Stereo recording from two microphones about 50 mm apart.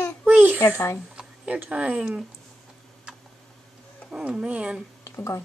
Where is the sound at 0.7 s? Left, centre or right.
Left.